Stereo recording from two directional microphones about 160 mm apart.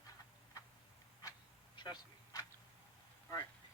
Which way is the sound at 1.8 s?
30° left (ahead or behind).